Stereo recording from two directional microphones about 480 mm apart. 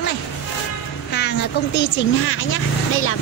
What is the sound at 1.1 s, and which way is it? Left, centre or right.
Vehicle, left.